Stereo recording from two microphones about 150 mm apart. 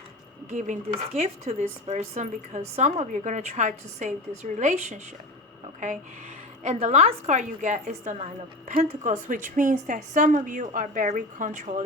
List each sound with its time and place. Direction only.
0.5 s speech: 50° right (ahead or behind)
6.6 s a woman's voice: 50° right (ahead or behind)